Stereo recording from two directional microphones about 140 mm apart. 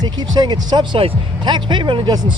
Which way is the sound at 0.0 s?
30° right (ahead or behind).